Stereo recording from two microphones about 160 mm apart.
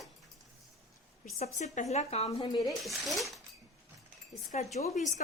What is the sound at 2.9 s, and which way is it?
Speech, centre (ahead or behind).